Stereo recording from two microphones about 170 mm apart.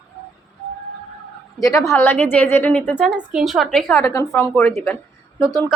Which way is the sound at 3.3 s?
Centre (ahead or behind).